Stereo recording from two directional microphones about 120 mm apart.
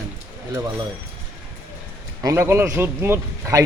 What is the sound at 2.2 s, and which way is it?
A man's voice, 30° right (ahead or behind).